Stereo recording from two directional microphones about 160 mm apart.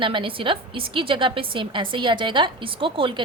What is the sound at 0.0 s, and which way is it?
A woman's voice, 30° right (ahead or behind).